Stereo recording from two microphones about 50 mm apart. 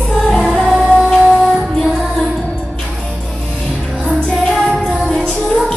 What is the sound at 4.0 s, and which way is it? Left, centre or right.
Music, centre.